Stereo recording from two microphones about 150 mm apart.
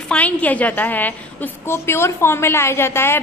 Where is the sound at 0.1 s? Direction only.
10° left (ahead or behind).